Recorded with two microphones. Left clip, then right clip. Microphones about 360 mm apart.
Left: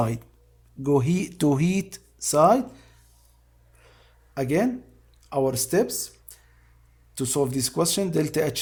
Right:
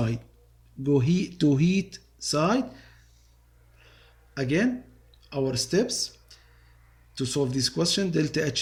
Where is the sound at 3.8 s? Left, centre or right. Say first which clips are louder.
Even; centre.